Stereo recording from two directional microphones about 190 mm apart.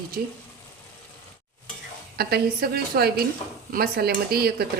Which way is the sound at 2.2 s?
55° right (ahead or behind).